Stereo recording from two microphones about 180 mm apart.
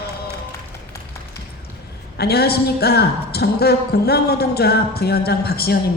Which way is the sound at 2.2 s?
60° left (ahead or behind).